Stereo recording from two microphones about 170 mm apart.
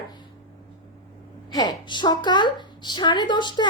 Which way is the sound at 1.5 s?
25° left (ahead or behind).